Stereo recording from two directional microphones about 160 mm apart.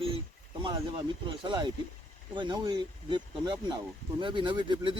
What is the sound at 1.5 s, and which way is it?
Speech, 30° right (ahead or behind).